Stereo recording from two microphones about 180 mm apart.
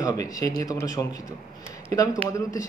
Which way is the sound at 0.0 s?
20° left (ahead or behind).